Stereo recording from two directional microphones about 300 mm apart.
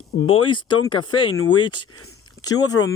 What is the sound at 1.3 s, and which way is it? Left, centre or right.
Speech, left.